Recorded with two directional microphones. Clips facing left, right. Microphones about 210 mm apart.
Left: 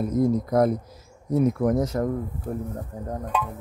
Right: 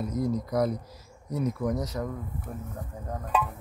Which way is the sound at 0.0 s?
50° left (ahead or behind).